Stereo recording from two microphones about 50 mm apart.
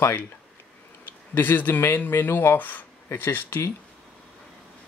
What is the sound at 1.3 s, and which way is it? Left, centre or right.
Speech, left.